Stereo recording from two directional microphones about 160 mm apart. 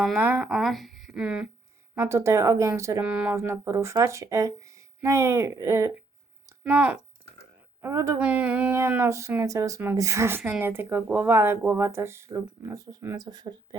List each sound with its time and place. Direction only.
0.2 s speech: 10° right (ahead or behind)
0.4 s speech: centre (ahead or behind)
2.0 s speech: 15° right (ahead or behind)
7.8 s speech: 20° right (ahead or behind)
8.2 s speech: 10° right (ahead or behind); by 13.7 s 25° right (ahead or behind)